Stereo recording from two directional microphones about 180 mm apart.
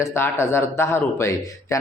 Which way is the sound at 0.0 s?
15° left (ahead or behind).